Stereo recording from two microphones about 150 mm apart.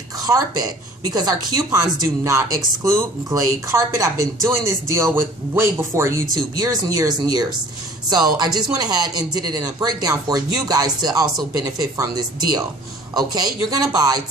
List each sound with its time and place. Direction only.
0.3 s speech: 20° right (ahead or behind)